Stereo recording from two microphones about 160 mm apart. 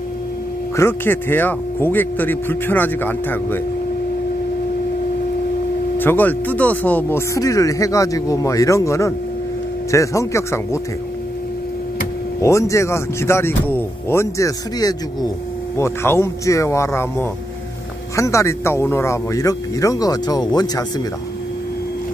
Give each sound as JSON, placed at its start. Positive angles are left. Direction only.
{"t": 0.7, "sound": "speech", "side_deg": 15}
{"t": 5.9, "sound": "speech", "side_deg": 10}
{"t": 12.4, "sound": "speech", "side_deg": 20}